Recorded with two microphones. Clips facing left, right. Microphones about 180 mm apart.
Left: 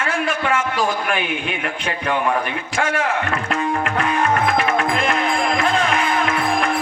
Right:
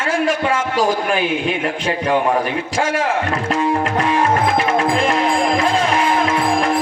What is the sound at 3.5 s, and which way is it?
Music, 30° right (ahead or behind).